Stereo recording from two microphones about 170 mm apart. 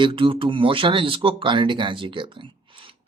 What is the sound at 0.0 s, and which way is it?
Speech, 30° right (ahead or behind).